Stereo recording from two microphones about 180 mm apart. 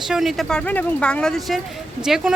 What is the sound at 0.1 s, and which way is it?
Speech, centre (ahead or behind).